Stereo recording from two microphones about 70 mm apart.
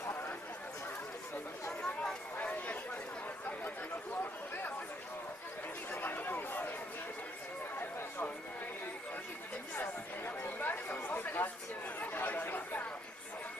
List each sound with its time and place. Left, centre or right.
1.7 s chatter: centre
2.3 s chatter: left
5.9 s chatter: left
9.8 s chatter: left